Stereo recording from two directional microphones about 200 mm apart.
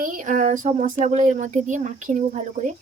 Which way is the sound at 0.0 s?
40° right (ahead or behind).